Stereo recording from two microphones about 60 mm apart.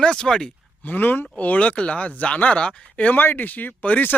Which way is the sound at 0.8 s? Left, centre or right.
Left.